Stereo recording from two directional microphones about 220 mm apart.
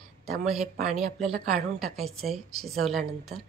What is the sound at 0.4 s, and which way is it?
Speech, 30° right (ahead or behind).